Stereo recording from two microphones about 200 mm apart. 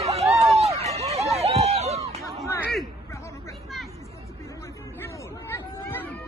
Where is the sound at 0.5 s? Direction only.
30° right (ahead or behind).